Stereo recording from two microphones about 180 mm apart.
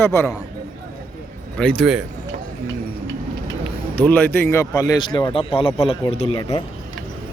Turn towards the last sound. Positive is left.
turn(degrees=25)  # may be behind; listen again after turning